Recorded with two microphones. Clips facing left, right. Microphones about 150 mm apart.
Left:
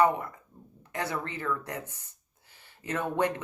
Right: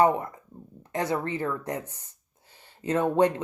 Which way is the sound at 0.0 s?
30° right (ahead or behind).